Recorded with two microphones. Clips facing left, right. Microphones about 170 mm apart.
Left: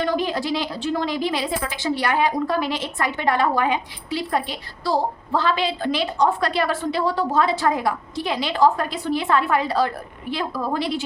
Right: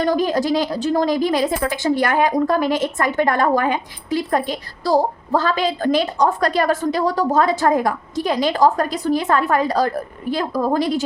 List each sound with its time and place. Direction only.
0.0 s a woman's voice: 40° right (ahead or behind)